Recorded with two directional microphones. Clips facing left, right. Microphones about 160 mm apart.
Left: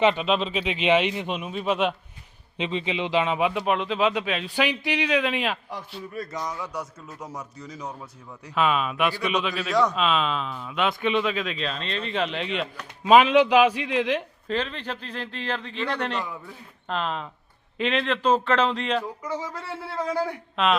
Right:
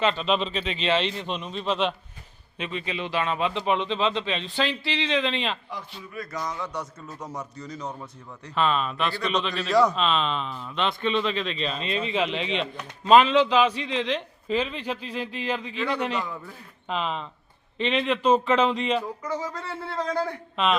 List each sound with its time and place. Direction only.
0.0 s speech: 15° left (ahead or behind)
0.3 s speech: centre (ahead or behind)
2.6 s a man's voice: 20° left (ahead or behind)
14.4 s speech: 5° right (ahead or behind)
19.2 s speech: 10° left (ahead or behind)